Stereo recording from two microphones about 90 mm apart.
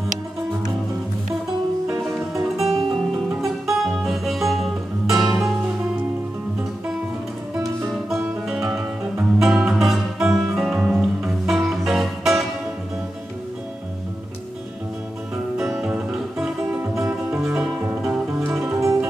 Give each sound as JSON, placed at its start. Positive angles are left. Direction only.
{"t": 1.9, "sound": "music", "side_deg": -20}
{"t": 2.3, "sound": "music", "side_deg": -5}
{"t": 8.5, "sound": "music", "side_deg": -10}
{"t": 15.5, "sound": "music", "side_deg": -5}
{"t": 17.6, "sound": "music", "side_deg": -10}
{"t": 18.4, "sound": "music", "side_deg": -30}